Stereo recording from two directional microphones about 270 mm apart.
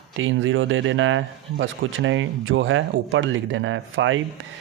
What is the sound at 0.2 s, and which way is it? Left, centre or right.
A man's voice, right.